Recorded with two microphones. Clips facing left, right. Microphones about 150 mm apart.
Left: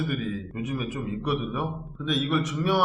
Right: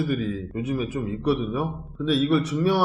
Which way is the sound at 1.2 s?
30° right (ahead or behind).